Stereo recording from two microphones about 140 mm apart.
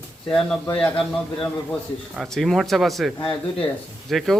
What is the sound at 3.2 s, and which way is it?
Speech, 40° left (ahead or behind).